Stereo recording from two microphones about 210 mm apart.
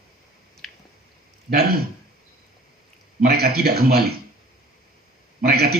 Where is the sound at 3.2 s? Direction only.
45° right (ahead or behind).